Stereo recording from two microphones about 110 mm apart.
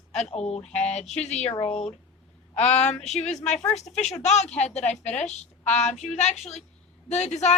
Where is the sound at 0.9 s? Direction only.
90° left.